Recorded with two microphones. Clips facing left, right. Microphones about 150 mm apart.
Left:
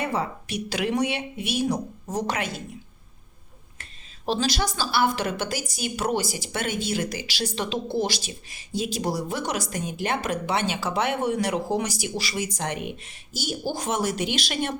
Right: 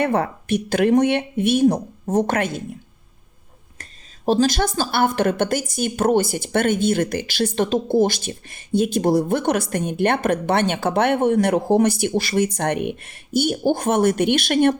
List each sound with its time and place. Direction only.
0.0 s speech: 60° right (ahead or behind)
4.3 s a woman's voice: 50° right (ahead or behind)